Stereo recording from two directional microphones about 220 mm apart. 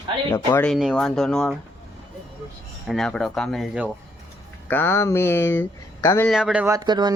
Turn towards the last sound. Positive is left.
turn(degrees=-20)  # may be behind; listen again after turning